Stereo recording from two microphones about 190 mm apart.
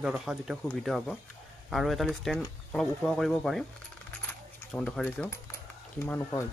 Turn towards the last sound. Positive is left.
turn(degrees=15)  # may be behind; listen again after turning